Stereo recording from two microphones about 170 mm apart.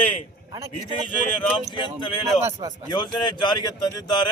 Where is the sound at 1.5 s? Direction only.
30° left (ahead or behind).